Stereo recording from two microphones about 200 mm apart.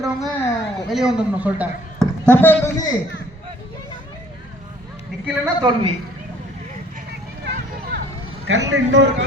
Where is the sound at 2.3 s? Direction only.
10° left (ahead or behind).